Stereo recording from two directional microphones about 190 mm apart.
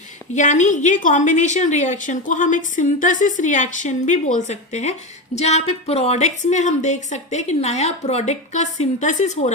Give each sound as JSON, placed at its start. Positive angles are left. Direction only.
{"t": 0.3, "sound": "a woman's voice", "side_deg": 40}